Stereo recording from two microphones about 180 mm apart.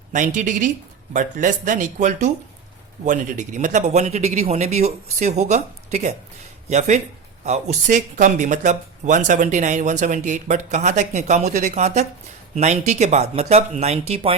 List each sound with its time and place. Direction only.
0.1 s speech: 45° right (ahead or behind)